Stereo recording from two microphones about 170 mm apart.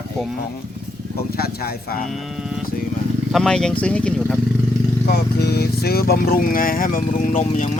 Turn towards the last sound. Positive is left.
turn(degrees=40)  # may be behind; listen again after turning